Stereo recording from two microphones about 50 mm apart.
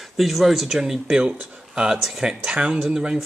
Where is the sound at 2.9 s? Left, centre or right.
Centre.